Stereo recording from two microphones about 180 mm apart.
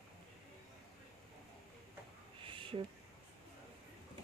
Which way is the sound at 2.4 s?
30° right (ahead or behind).